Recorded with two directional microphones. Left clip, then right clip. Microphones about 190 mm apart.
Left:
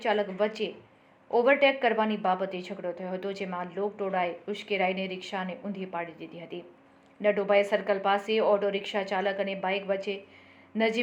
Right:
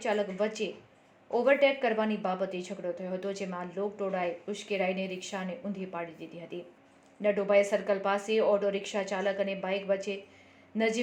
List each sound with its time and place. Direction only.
0.0 s a woman's voice: 25° right (ahead or behind)